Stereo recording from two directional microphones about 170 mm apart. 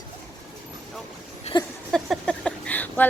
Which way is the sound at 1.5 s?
25° left (ahead or behind).